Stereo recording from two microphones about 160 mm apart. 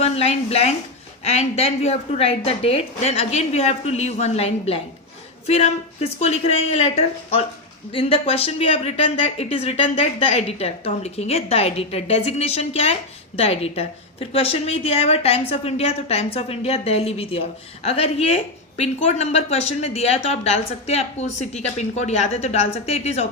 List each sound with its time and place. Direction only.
0.0 s speech: 40° left (ahead or behind)